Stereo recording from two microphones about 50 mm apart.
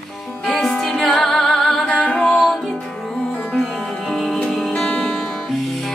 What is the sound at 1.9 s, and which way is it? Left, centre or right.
Music, centre.